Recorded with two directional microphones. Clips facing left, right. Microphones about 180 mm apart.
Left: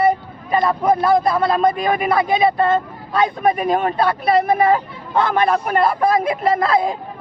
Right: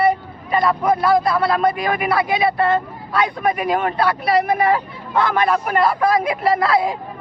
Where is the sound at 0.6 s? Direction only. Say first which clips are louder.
Left 1 dB; 25° left (ahead or behind).